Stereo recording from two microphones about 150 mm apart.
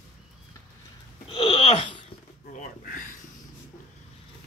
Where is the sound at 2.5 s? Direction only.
60° left (ahead or behind).